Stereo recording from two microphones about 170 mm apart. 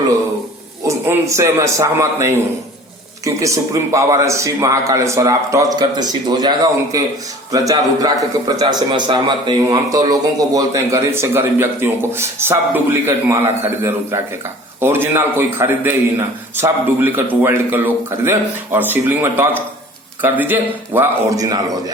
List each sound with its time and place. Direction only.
0.9 s a man's voice: 15° right (ahead or behind)